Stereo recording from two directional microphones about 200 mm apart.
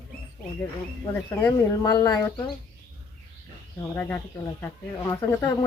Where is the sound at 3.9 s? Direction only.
10° left (ahead or behind).